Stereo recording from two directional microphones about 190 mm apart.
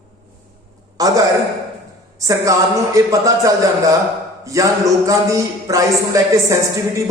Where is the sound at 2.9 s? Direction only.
15° right (ahead or behind).